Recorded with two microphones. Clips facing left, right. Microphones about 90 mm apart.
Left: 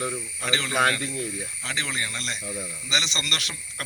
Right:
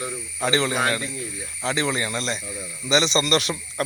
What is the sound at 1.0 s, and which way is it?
Speech, 60° left (ahead or behind).